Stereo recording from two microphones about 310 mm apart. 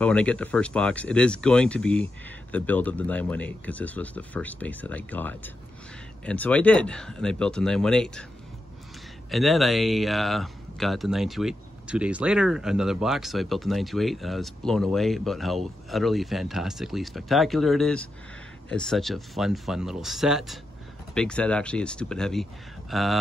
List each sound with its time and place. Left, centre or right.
0.0 s a man's voice: centre
9.3 s a man's voice: centre